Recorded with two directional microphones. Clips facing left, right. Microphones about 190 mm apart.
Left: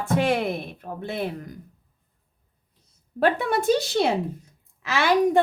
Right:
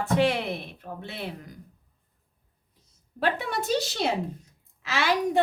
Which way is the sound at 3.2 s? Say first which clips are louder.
Left 6 dB; 50° left (ahead or behind).